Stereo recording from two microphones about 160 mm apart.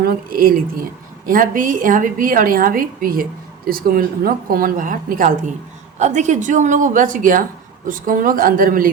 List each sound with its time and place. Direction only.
0.0 s a woman's voice: 65° right (ahead or behind)
6.0 s a woman's voice: 50° right (ahead or behind)